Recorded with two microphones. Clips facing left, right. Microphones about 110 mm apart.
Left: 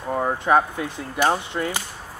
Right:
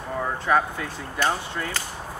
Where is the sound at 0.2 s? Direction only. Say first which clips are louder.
Left 3 dB; 25° left (ahead or behind).